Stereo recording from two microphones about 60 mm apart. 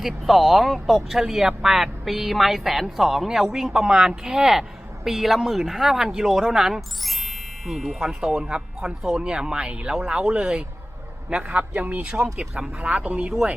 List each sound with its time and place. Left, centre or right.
0.0 s speech: centre
8.2 s a man's voice: centre